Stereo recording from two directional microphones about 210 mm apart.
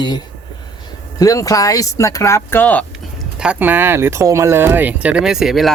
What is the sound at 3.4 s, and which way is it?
Speech, 5° right (ahead or behind).